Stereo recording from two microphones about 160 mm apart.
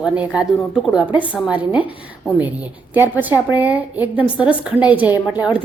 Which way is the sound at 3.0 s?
10° right (ahead or behind).